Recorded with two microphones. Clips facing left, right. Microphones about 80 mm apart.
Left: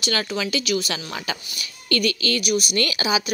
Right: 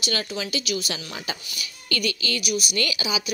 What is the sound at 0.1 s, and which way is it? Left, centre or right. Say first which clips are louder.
Speech: left 4 dB; left.